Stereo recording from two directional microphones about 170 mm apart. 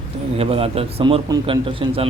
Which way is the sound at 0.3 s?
35° right (ahead or behind).